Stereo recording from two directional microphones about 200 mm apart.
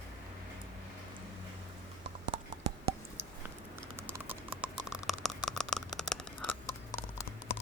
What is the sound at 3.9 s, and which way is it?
Typing, 10° right (ahead or behind).